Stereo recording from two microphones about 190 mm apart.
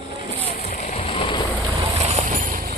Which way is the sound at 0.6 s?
40° left (ahead or behind).